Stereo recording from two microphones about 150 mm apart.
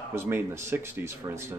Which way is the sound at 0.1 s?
15° right (ahead or behind).